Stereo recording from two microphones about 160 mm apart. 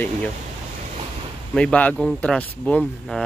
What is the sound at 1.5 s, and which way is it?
Speech, 5° left (ahead or behind).